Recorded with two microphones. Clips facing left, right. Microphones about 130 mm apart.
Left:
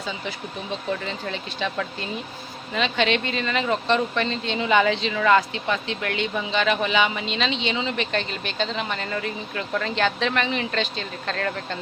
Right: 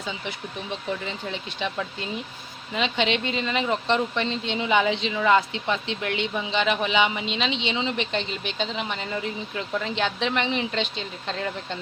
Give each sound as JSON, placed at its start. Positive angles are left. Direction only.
{"t": 1.0, "sound": "speech", "side_deg": -15}